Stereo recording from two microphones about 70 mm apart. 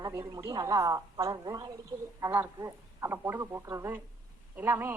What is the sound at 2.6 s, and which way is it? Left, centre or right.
A woman's voice, right.